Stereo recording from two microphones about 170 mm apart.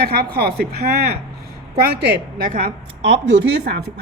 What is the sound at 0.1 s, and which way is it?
Speech, 70° right (ahead or behind).